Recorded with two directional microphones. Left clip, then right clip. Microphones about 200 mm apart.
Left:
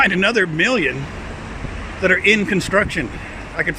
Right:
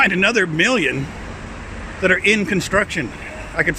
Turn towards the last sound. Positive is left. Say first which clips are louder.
# right 2 dB
turn(degrees=-15)  # may be behind; listen again after turning